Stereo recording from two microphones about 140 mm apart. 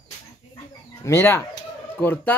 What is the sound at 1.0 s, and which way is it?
Speech, 20° left (ahead or behind).